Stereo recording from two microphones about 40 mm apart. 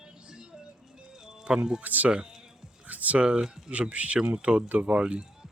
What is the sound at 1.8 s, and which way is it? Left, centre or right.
Speech, right.